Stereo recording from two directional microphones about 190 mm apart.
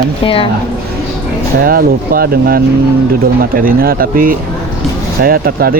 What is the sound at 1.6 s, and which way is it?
Speech, 50° right (ahead or behind).